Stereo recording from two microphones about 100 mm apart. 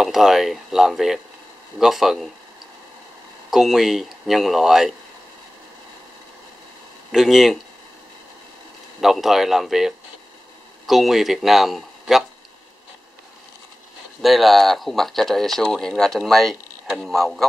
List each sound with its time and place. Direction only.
0.0 s speech: 5° right (ahead or behind)
3.4 s speech: 5° right (ahead or behind)
7.1 s speech: centre (ahead or behind)
9.0 s speech: 5° right (ahead or behind)
14.2 s speech: centre (ahead or behind)